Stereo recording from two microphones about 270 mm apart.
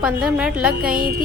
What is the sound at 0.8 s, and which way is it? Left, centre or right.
Music, right.